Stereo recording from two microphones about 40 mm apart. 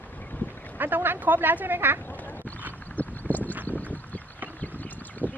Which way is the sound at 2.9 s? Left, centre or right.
Left.